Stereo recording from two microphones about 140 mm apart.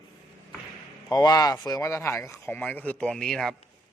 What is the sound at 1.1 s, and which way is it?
A man's voice, 30° left (ahead or behind).